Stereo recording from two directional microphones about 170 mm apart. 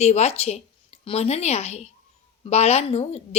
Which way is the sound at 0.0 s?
40° left (ahead or behind).